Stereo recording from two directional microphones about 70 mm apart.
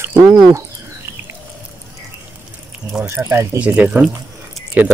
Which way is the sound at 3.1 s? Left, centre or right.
Right.